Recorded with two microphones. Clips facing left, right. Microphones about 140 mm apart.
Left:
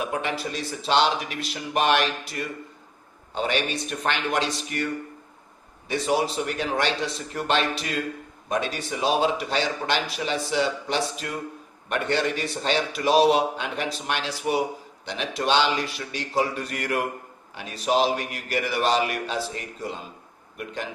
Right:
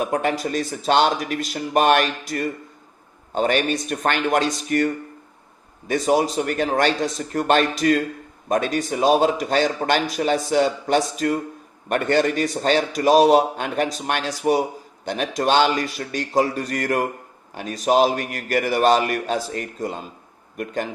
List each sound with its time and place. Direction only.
0.0 s a man's voice: 45° right (ahead or behind)
5.9 s a man's voice: 45° right (ahead or behind)